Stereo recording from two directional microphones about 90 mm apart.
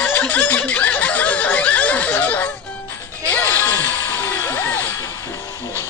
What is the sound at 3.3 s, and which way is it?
Music, 20° left (ahead or behind).